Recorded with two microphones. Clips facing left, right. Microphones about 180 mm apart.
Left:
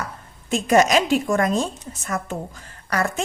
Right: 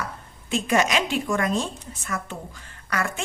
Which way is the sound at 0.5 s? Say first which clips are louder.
Left 5 dB; 40° left (ahead or behind).